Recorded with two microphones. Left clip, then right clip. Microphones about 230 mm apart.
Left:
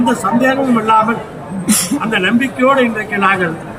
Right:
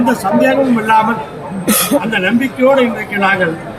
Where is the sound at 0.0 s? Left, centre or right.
Centre.